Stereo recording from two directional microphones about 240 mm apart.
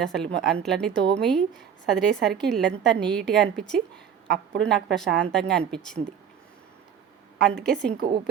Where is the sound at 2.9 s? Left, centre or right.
Right.